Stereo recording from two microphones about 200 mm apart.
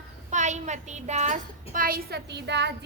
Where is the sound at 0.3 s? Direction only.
35° right (ahead or behind).